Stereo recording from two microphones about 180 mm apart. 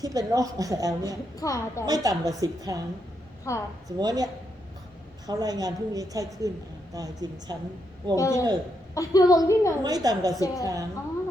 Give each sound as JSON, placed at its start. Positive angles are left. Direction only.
{"t": 0.0, "sound": "a woman's voice", "side_deg": -20}
{"t": 1.4, "sound": "a woman's voice", "side_deg": 20}
{"t": 1.9, "sound": "a woman's voice", "side_deg": -20}
{"t": 3.5, "sound": "a woman's voice", "side_deg": 15}
{"t": 3.8, "sound": "a woman's voice", "side_deg": -20}
{"t": 8.1, "sound": "a woman's voice", "side_deg": 15}
{"t": 9.8, "sound": "a woman's voice", "side_deg": -20}